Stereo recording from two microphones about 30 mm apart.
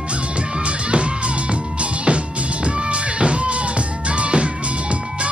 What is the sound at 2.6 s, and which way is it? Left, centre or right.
Music, right.